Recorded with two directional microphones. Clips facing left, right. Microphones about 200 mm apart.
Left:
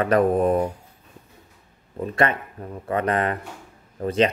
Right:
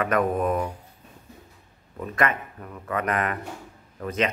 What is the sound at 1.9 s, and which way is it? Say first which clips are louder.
Speech: left 3 dB; 30° left (ahead or behind).